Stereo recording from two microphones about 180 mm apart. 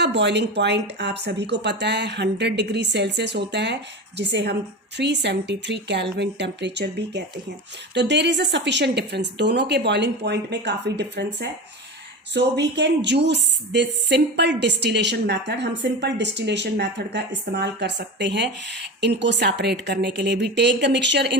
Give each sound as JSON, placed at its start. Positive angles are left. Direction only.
{"t": 0.0, "sound": "speech", "side_deg": -75}